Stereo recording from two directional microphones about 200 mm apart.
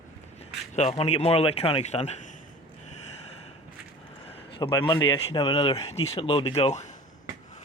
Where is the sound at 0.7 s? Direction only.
30° left (ahead or behind).